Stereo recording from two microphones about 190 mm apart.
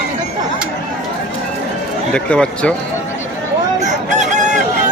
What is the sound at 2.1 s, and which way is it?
Speech, 5° left (ahead or behind).